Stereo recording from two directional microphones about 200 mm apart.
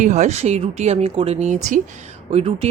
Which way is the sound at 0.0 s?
35° right (ahead or behind).